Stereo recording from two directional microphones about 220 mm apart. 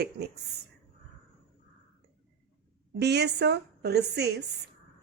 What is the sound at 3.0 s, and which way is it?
A woman's voice, 50° right (ahead or behind).